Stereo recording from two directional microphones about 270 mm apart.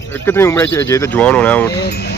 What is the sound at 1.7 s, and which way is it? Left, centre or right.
Speech, left.